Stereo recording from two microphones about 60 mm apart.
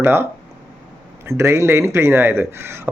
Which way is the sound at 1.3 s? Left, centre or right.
Right.